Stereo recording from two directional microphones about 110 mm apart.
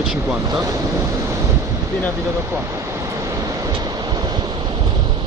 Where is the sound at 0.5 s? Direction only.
30° right (ahead or behind).